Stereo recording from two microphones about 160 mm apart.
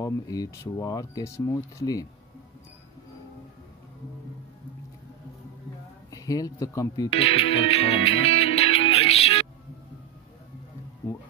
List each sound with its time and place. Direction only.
0.0 s speech: 20° left (ahead or behind)
6.0 s speech: 20° left (ahead or behind)
7.2 s music: 40° left (ahead or behind)